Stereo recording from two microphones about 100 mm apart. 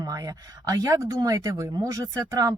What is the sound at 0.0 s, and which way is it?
Speech, 35° right (ahead or behind).